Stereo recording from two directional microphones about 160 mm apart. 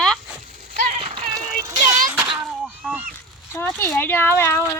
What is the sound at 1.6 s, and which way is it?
Speech, 20° right (ahead or behind).